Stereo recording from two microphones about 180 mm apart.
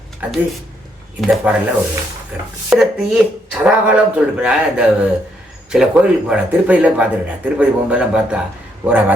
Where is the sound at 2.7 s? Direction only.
5° right (ahead or behind).